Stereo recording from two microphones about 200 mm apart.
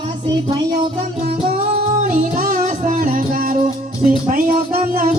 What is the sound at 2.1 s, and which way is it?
Music, 35° right (ahead or behind).